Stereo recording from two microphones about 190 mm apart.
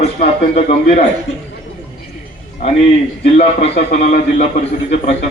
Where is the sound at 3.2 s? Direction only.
35° left (ahead or behind).